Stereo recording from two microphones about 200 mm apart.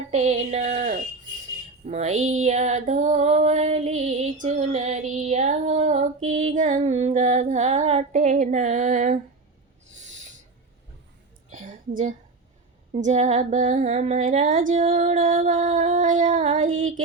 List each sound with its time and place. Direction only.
0.1 s female singing: 35° right (ahead or behind)
10.0 s owl: 35° right (ahead or behind)
11.5 s a sound: 40° right (ahead or behind)
12.9 s female singing: 35° right (ahead or behind)